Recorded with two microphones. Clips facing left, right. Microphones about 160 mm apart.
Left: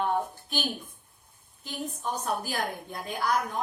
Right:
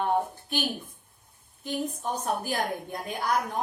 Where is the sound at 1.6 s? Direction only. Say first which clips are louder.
Right 3 dB; 55° right (ahead or behind).